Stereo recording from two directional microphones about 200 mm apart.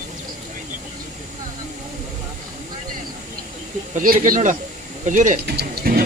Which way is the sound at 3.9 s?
40° right (ahead or behind).